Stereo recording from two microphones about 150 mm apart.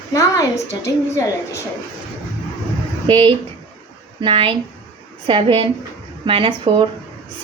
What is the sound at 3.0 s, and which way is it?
Speech, 35° right (ahead or behind).